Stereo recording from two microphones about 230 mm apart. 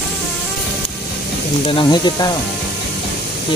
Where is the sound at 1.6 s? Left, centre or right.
Left.